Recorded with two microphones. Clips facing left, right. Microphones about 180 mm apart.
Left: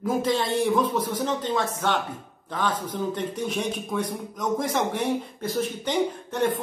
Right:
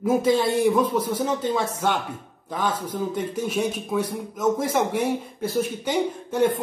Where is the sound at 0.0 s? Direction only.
10° right (ahead or behind).